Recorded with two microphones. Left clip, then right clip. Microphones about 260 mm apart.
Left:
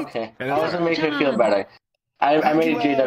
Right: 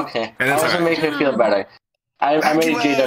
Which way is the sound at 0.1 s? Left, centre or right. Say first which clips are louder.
Right 7 dB; right.